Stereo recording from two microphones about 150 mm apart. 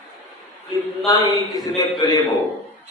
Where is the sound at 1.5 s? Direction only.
25° left (ahead or behind).